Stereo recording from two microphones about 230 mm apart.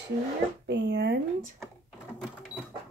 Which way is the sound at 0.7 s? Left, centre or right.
Right.